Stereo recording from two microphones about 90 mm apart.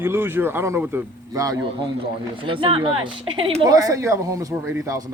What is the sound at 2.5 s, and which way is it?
Speech, 70° right (ahead or behind).